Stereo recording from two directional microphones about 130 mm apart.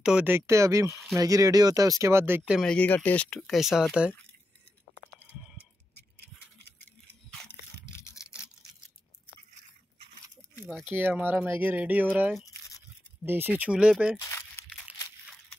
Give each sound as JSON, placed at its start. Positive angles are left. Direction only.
{"t": 0.0, "sound": "speech", "side_deg": -10}
{"t": 2.6, "sound": "speech", "side_deg": 10}
{"t": 10.7, "sound": "speech", "side_deg": -15}
{"t": 14.2, "sound": "crumpling", "side_deg": 20}